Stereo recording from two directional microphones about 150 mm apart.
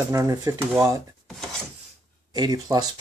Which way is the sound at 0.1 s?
20° right (ahead or behind).